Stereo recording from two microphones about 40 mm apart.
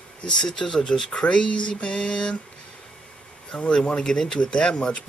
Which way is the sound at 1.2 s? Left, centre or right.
Left.